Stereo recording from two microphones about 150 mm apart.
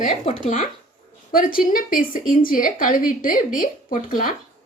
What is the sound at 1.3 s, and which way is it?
A woman's voice, 70° left (ahead or behind).